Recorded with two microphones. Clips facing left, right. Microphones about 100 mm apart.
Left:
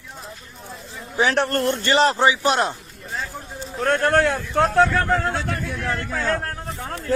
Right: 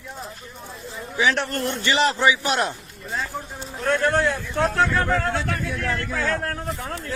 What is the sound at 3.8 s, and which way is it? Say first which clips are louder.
Speech: left 2 dB; 45° left (ahead or behind).